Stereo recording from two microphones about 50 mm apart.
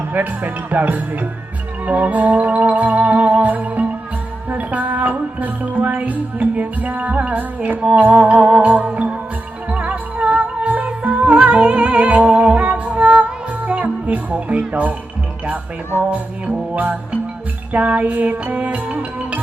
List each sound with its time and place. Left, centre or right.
0.1 s music: right
16.0 s music: right